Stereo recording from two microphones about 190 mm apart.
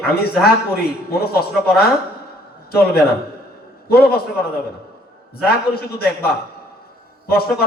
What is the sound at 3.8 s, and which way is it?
Speech, 55° left (ahead or behind).